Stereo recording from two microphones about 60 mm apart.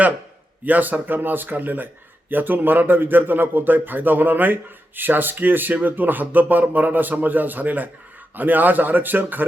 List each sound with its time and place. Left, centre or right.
0.6 s speech: right